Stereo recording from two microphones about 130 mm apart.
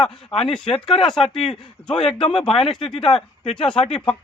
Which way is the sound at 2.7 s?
Centre (ahead or behind).